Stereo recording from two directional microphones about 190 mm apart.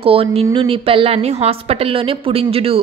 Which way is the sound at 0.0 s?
30° right (ahead or behind).